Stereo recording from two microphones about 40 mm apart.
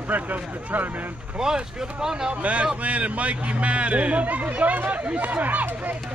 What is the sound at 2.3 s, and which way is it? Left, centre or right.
Speech, right.